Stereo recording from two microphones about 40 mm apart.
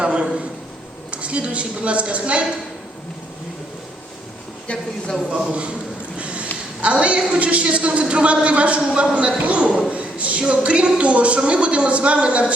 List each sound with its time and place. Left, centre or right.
0.0 s a sound: right
1.1 s speech: right
4.7 s speech: left
5.5 s speech: right
6.1 s a sound: right
6.8 s speech: right